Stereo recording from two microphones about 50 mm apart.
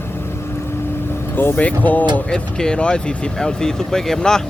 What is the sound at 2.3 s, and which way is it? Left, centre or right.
Speech, centre.